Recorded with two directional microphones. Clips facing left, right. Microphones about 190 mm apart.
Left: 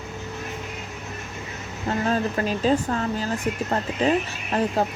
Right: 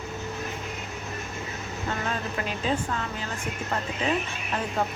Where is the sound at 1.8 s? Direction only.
35° left (ahead or behind).